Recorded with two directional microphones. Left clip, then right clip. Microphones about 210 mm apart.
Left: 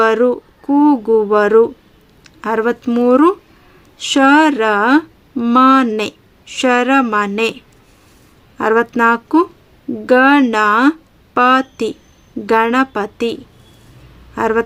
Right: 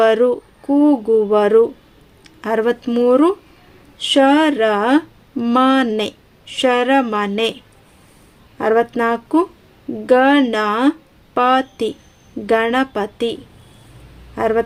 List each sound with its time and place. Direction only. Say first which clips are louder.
0.0 s speech: left 1 dB; 20° left (ahead or behind)
8.5 s speech: left 2 dB; 20° left (ahead or behind)
14.3 s speech: left 2 dB; 20° left (ahead or behind)